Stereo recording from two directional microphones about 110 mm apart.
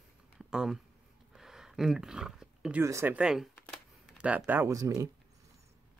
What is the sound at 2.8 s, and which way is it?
Speech, 25° right (ahead or behind).